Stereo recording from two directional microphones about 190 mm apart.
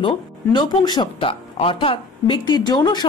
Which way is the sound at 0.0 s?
25° left (ahead or behind).